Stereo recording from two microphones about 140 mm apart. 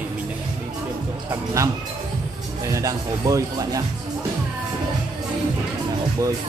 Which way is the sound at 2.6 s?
25° right (ahead or behind).